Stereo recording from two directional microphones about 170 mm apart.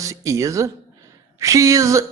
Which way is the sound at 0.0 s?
20° right (ahead or behind).